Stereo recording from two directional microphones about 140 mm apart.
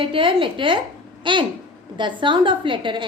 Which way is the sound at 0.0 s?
40° right (ahead or behind).